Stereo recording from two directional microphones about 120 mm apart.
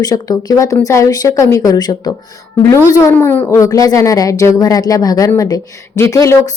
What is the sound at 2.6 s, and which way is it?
A woman's voice, 25° left (ahead or behind).